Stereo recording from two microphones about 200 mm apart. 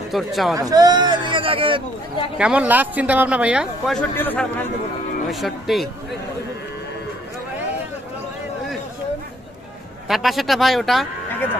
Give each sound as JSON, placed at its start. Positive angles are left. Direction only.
{"t": 0.1, "sound": "speech", "side_deg": 0}
{"t": 0.6, "sound": "speech", "side_deg": -20}
{"t": 2.3, "sound": "speech", "side_deg": -5}
{"t": 10.0, "sound": "speech", "side_deg": 0}